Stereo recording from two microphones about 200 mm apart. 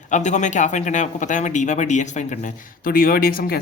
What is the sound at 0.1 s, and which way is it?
A man's voice, 35° left (ahead or behind).